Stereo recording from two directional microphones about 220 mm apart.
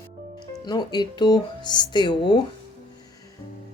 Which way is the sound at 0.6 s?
20° left (ahead or behind).